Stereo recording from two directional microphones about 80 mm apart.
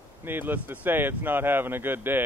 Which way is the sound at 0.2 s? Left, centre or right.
Right.